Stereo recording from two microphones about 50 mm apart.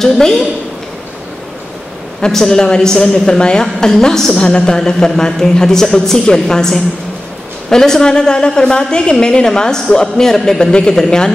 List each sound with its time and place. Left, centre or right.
0.0 s speech: centre
2.2 s speech: centre
3.6 s a woman's voice: centre